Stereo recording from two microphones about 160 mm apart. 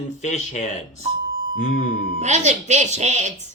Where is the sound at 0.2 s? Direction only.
45° left (ahead or behind).